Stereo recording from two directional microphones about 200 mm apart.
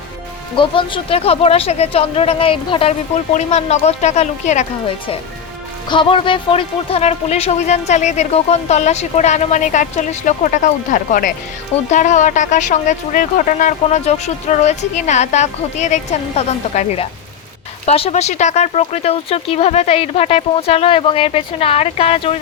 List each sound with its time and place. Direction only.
0.5 s speech: 25° left (ahead or behind)